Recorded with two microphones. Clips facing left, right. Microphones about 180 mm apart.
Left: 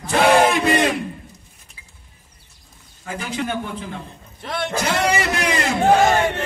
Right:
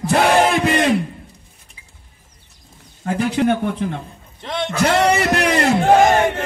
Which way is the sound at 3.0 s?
60° right (ahead or behind).